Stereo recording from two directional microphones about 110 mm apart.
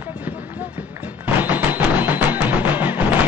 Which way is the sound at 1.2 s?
15° right (ahead or behind).